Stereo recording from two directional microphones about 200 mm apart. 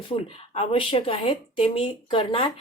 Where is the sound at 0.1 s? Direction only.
30° left (ahead or behind).